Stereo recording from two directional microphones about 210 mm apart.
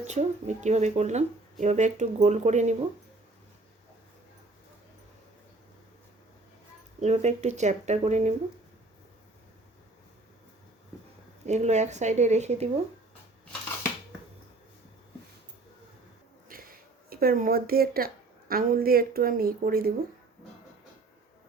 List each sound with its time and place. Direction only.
0.0 s speech: 35° right (ahead or behind)
7.0 s speech: 35° right (ahead or behind)
11.4 s speech: 35° right (ahead or behind)
16.5 s speech: 45° right (ahead or behind)